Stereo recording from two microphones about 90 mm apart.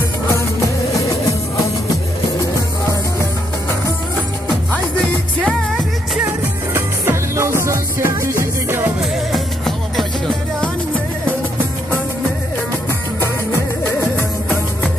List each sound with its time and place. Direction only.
6.7 s music: 30° right (ahead or behind)
9.3 s music: 5° left (ahead or behind)
13.2 s music: 25° left (ahead or behind)